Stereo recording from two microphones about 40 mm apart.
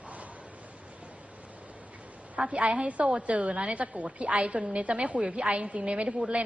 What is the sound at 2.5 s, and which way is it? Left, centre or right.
A woman's voice, right.